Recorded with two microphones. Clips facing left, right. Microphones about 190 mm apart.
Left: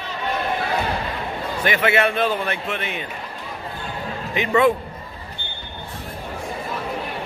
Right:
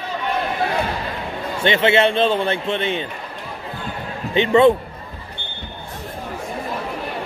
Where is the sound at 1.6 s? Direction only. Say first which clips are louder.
Right 4 dB; 25° right (ahead or behind).